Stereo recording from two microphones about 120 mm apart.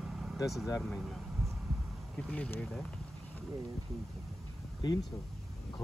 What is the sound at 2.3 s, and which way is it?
Speech, 10° left (ahead or behind).